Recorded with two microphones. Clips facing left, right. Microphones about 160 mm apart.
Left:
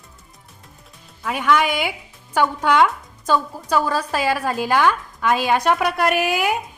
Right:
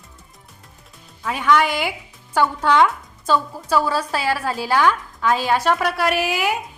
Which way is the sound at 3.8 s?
10° right (ahead or behind).